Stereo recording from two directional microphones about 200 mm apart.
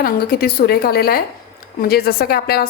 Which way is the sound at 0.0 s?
50° left (ahead or behind).